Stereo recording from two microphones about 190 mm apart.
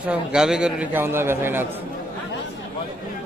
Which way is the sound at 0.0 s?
5° right (ahead or behind).